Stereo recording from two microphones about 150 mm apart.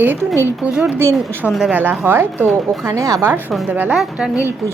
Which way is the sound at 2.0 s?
15° right (ahead or behind).